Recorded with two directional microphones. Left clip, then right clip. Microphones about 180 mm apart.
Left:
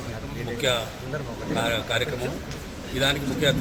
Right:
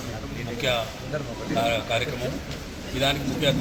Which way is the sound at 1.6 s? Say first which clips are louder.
Even; centre (ahead or behind).